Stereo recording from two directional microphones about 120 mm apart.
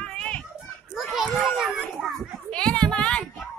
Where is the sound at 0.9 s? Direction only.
5° right (ahead or behind).